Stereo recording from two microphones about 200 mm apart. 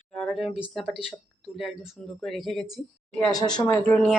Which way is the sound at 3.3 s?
20° left (ahead or behind).